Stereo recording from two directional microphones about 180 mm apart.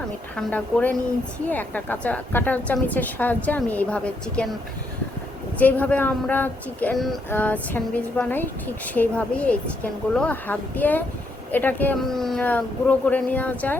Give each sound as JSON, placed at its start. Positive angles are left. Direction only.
{"t": 0.3, "sound": "a woman's voice", "side_deg": 10}
{"t": 5.5, "sound": "a woman's voice", "side_deg": 10}